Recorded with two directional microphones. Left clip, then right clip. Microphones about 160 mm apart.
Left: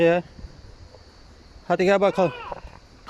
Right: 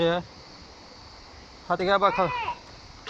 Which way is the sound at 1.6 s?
65° left (ahead or behind).